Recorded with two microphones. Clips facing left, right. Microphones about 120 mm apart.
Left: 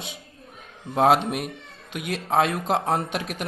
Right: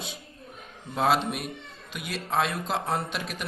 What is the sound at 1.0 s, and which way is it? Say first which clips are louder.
A man's voice: left 5 dB; 55° left (ahead or behind).